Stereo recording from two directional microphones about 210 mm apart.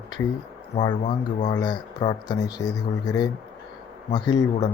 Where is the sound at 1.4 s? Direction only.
20° left (ahead or behind).